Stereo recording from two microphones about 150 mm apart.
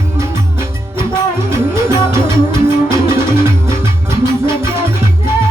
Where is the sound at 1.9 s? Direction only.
20° right (ahead or behind).